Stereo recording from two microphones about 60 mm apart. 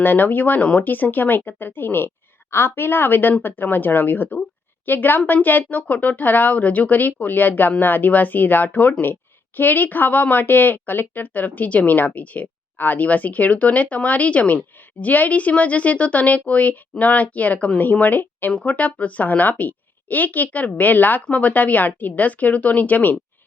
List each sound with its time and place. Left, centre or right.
0.0 s speech: left